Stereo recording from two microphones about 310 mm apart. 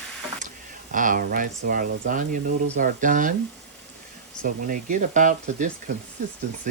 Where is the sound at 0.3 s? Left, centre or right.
Right.